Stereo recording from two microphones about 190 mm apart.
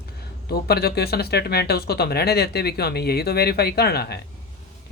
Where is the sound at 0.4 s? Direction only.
55° left (ahead or behind).